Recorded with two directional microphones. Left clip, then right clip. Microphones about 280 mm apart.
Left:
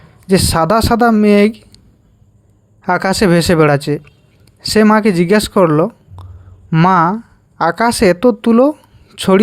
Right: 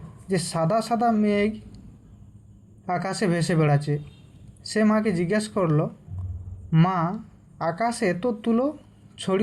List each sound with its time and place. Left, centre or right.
0.3 s speech: left
2.8 s speech: left